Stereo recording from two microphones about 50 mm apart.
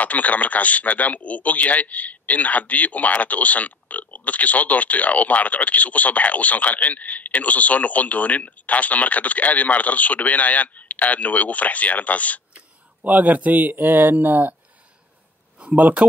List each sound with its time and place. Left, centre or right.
0.0 s speech: left
12.5 s speech: right
15.6 s speech: right